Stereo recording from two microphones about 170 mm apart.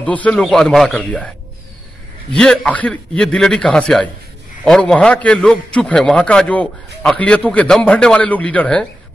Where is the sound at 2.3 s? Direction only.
5° left (ahead or behind).